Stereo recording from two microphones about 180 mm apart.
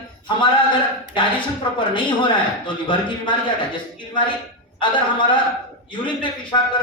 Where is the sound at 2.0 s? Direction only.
25° left (ahead or behind).